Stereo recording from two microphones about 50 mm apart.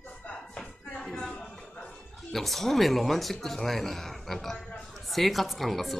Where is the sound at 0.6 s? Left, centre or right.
Centre.